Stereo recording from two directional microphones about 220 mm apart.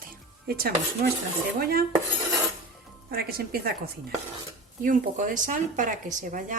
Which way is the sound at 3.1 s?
45° right (ahead or behind).